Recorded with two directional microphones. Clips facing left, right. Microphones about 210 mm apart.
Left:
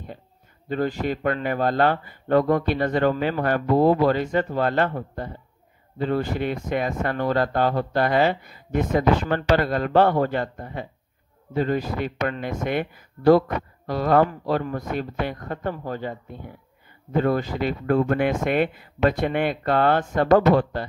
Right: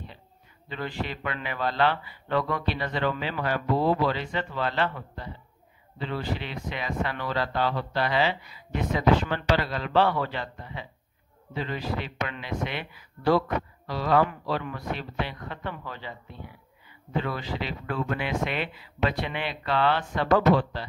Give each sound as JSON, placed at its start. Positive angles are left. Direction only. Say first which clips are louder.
{"t": 0.7, "sound": "speech", "louder": "left 9 dB", "side_deg": 45}